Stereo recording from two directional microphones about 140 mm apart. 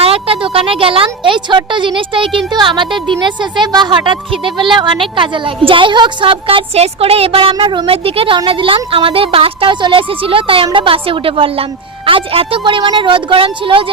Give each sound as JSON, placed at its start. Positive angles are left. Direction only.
{"t": 0.0, "sound": "a woman's voice", "side_deg": -45}